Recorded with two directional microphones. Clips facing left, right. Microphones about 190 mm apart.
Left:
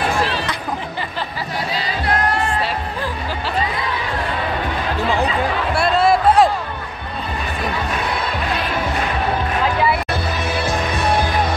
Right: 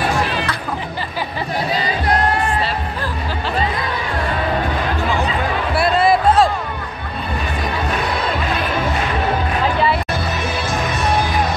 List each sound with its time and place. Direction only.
5.8 s music: centre (ahead or behind)